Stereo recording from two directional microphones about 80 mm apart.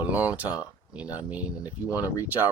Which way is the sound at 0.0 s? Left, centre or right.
Right.